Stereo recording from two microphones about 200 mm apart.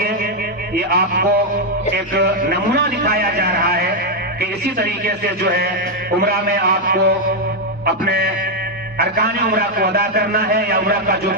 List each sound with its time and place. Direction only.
0.7 s a man's voice: 50° right (ahead or behind)